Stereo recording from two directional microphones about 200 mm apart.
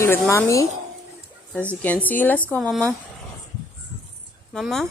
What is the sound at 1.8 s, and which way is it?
Speech, 10° left (ahead or behind).